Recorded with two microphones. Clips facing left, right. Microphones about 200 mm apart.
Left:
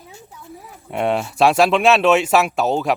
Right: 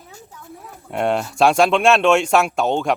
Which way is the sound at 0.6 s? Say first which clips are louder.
Even; centre (ahead or behind).